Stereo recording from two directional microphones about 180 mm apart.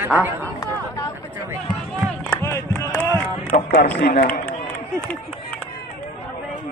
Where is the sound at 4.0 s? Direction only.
60° left (ahead or behind).